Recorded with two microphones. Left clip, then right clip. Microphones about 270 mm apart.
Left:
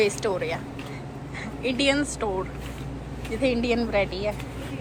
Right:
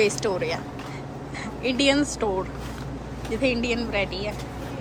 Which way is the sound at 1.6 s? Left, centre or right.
Centre.